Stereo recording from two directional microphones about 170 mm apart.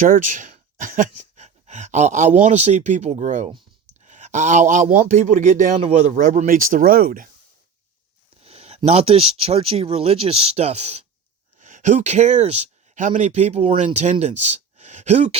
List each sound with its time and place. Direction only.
0.0 s a man's voice: 50° right (ahead or behind)
8.4 s speech: 35° right (ahead or behind)